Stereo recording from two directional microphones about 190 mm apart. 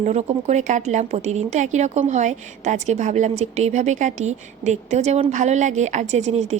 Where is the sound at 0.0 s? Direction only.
35° right (ahead or behind).